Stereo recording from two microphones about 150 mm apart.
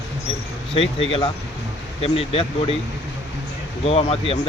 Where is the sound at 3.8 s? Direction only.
40° left (ahead or behind).